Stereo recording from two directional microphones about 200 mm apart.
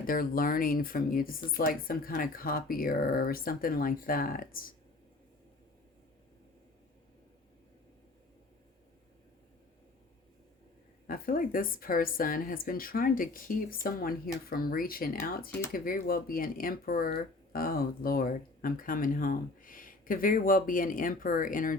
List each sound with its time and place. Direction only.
0.0 s speech: 45° left (ahead or behind)
11.0 s speech: 45° left (ahead or behind)